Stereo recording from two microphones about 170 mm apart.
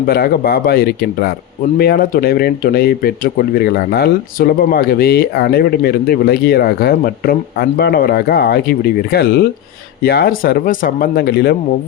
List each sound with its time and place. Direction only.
0.0 s speech: 65° left (ahead or behind)